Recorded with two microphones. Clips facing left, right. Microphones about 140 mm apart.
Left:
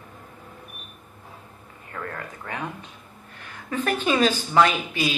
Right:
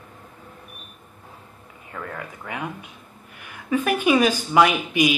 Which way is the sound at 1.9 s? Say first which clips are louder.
Even; 5° right (ahead or behind).